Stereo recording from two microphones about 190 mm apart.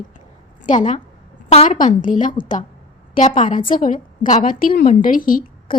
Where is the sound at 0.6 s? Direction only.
40° left (ahead or behind).